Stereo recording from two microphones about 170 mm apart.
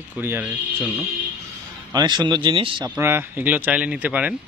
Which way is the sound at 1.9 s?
25° right (ahead or behind).